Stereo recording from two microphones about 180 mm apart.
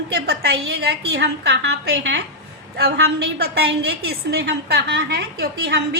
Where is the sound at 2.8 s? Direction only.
65° right (ahead or behind).